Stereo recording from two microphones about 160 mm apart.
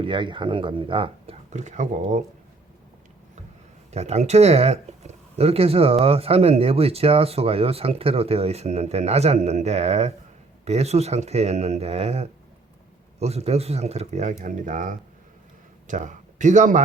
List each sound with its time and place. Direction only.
0.0 s speech: 30° right (ahead or behind); by 2.2 s 50° right (ahead or behind)
3.9 s speech: 45° right (ahead or behind)